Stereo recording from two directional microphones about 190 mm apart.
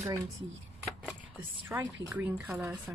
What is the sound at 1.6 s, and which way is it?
A woman's voice, 10° right (ahead or behind).